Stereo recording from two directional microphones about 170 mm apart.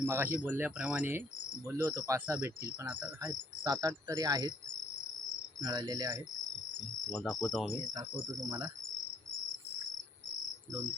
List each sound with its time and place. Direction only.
0.0 s speech: 15° right (ahead or behind)
5.6 s speech: 25° right (ahead or behind)
7.1 s cricket: 5° left (ahead or behind)
8.4 s speech: 20° right (ahead or behind)